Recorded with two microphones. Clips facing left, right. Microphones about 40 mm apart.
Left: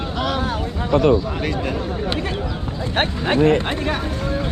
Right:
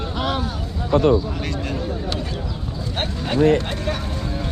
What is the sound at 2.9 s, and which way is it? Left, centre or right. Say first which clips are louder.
Speech: left 4 dB; left.